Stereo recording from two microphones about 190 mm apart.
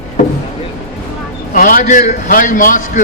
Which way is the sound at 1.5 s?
45° left (ahead or behind).